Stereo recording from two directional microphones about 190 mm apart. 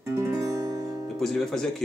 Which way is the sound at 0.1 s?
15° right (ahead or behind).